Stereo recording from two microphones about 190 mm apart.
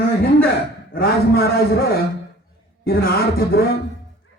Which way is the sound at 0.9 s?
55° left (ahead or behind).